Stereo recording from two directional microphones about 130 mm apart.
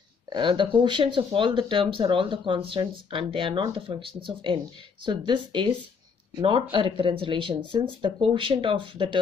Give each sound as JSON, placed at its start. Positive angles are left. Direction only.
{"t": 0.3, "sound": "speech", "side_deg": -40}